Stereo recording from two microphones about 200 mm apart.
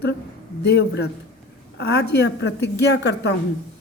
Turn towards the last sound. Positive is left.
turn(degrees=55)  # may be behind; listen again after turning